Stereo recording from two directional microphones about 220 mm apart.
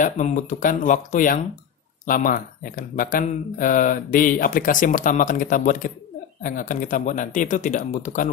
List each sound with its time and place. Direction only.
0.0 s speech: 35° left (ahead or behind)